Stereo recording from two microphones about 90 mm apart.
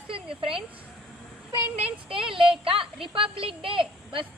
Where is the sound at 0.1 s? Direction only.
90° right.